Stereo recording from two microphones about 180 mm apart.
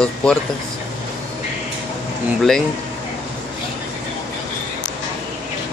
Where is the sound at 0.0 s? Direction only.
5° left (ahead or behind).